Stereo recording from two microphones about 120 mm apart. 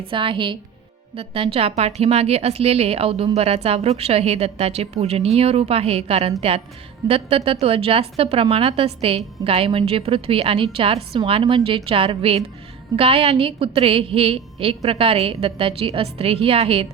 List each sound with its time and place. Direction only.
0.1 s a woman's voice: 45° right (ahead or behind)